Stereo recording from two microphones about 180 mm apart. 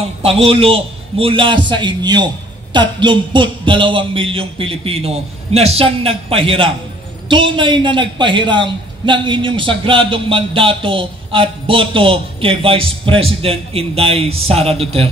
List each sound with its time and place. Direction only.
0.2 s a man's voice: 30° right (ahead or behind)